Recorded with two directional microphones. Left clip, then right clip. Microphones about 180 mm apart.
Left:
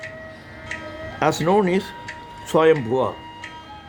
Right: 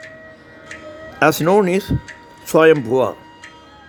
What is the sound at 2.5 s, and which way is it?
Speech, 30° right (ahead or behind).